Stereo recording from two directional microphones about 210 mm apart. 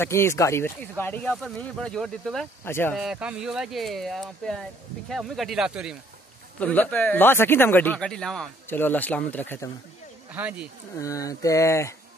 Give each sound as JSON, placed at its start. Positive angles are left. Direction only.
{"t": 0.0, "sound": "speech", "side_deg": 10}
{"t": 3.0, "sound": "speech", "side_deg": -5}
{"t": 6.6, "sound": "speech", "side_deg": 5}
{"t": 10.3, "sound": "speech", "side_deg": -5}
{"t": 11.0, "sound": "speech", "side_deg": 15}